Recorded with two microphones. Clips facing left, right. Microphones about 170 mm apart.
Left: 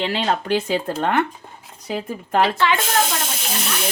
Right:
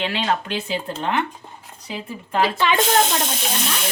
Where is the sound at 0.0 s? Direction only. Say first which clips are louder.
Left 1 dB; 35° left (ahead or behind).